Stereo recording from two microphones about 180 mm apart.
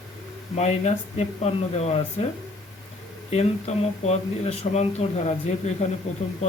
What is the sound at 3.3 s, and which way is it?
A man's voice, 35° left (ahead or behind).